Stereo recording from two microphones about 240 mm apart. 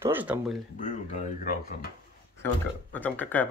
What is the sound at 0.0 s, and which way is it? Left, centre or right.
Speech, centre.